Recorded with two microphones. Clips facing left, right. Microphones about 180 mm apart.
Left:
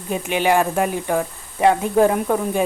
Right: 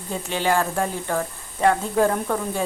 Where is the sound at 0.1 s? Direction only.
15° left (ahead or behind).